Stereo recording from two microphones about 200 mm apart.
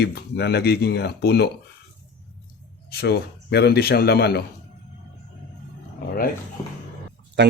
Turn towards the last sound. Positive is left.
turn(degrees=-60)  # may be behind; listen again after turning